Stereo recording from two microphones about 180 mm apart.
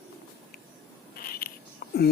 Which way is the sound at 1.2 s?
55° left (ahead or behind).